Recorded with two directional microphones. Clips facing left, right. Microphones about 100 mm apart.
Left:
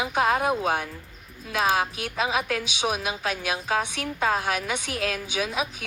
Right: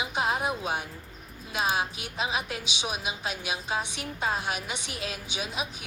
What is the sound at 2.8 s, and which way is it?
A woman's voice, 45° left (ahead or behind).